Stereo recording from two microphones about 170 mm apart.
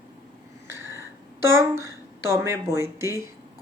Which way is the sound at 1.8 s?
15° right (ahead or behind).